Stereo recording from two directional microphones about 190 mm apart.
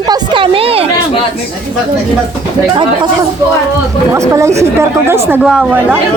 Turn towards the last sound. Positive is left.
turn(degrees=-5)  # may be behind; listen again after turning